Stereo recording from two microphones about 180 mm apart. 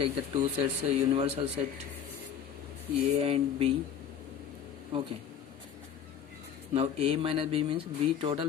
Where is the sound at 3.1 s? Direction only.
35° right (ahead or behind).